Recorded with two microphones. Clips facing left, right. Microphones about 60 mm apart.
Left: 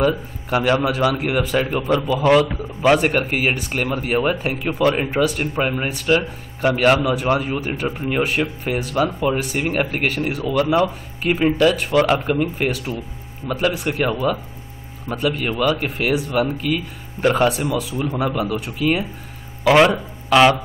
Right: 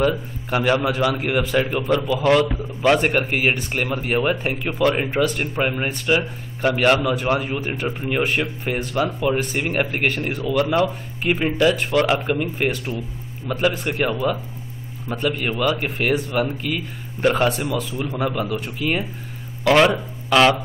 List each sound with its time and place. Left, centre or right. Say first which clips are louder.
0.0 s speech: left 1 dB; centre